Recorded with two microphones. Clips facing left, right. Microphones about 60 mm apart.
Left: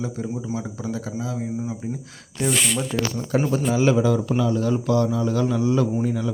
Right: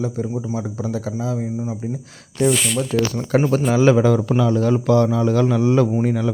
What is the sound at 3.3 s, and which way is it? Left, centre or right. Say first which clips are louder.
Speech: right 5 dB; right.